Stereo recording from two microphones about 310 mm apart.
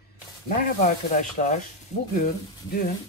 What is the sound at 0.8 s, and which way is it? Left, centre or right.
Speech, left.